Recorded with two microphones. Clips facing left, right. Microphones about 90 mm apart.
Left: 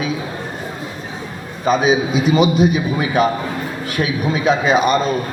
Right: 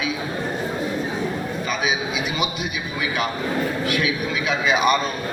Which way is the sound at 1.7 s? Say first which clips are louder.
Left 11 dB; 35° left (ahead or behind).